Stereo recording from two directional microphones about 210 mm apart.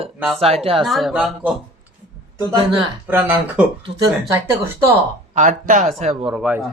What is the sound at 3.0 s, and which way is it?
Speech, 10° right (ahead or behind).